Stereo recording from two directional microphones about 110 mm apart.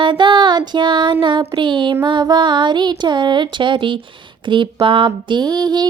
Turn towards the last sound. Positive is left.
turn(degrees=-40)  # may be behind; listen again after turning